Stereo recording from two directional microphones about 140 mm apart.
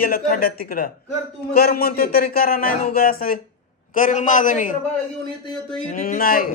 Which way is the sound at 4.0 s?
65° left (ahead or behind).